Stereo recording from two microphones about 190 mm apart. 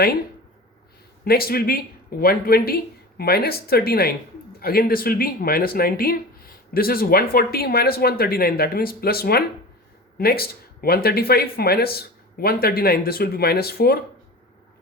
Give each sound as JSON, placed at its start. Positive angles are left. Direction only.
{"t": 1.2, "sound": "speech", "side_deg": 55}